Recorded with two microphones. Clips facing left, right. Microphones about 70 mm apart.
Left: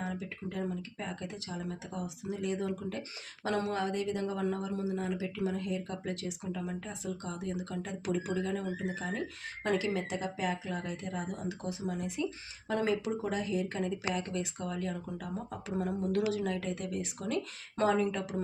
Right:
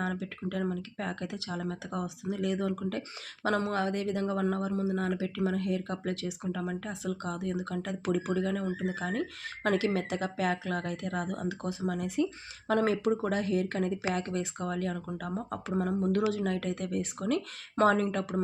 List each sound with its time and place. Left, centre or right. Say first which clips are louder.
0.0 s speech: right 4 dB; right
3.4 s speech: right 3 dB; right
16.3 s speech: right 2 dB; right